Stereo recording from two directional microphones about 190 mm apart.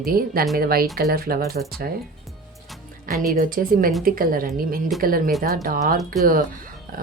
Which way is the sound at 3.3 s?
50° right (ahead or behind).